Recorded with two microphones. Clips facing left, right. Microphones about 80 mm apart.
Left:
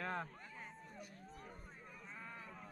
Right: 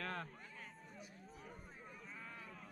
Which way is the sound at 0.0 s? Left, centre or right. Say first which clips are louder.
Left 3 dB; centre.